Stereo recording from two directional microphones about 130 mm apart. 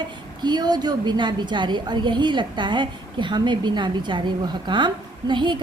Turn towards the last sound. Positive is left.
turn(degrees=-35)  # may be behind; listen again after turning